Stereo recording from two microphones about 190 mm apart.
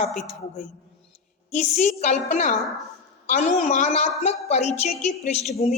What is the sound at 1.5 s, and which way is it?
A woman's voice, 35° left (ahead or behind).